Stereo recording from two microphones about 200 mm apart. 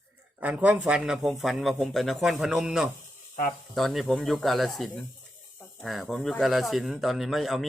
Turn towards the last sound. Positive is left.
turn(degrees=0)  # may be behind; listen again after turning